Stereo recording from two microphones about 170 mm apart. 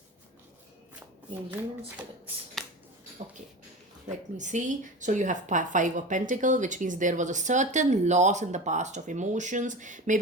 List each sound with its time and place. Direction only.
2.6 s finger snapping: centre (ahead or behind)
4.4 s a woman's voice: 45° right (ahead or behind)